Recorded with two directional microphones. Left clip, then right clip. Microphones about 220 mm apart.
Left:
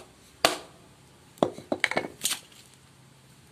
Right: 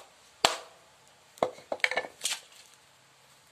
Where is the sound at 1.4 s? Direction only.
20° left (ahead or behind).